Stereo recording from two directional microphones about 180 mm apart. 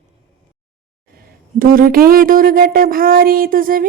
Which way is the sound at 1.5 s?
50° right (ahead or behind).